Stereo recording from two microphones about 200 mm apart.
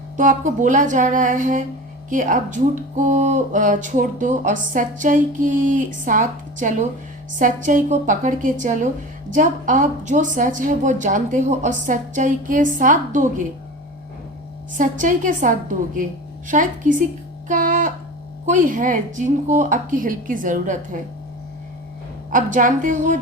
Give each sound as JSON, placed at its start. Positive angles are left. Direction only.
{"t": 0.2, "sound": "speech", "side_deg": -40}
{"t": 14.8, "sound": "speech", "side_deg": -40}
{"t": 17.5, "sound": "music", "side_deg": -40}
{"t": 18.4, "sound": "speech", "side_deg": -40}
{"t": 22.3, "sound": "speech", "side_deg": -40}